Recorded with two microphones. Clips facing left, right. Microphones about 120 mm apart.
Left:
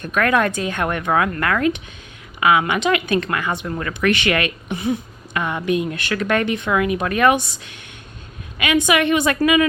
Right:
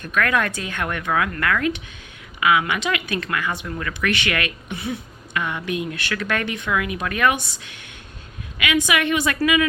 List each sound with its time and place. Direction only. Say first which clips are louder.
0.0 s speech: left 4 dB; 25° left (ahead or behind)
8.5 s speech: left 4 dB; 30° left (ahead or behind)